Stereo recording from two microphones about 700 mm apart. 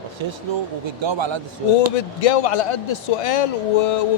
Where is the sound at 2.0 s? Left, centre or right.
Left.